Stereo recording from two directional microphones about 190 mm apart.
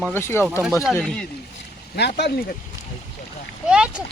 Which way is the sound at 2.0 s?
65° left (ahead or behind).